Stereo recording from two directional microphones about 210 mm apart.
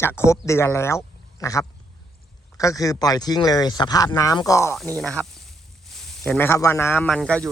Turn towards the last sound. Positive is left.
turn(degrees=5)  # may be behind; listen again after turning